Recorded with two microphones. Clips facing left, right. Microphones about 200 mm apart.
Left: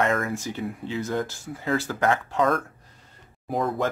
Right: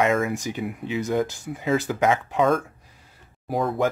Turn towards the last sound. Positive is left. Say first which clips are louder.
# right 1 dB
turn(degrees=0)  # may be behind; listen again after turning